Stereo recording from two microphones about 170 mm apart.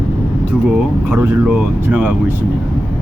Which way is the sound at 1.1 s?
15° right (ahead or behind).